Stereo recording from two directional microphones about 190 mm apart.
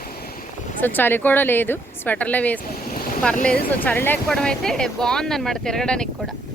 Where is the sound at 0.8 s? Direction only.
10° left (ahead or behind).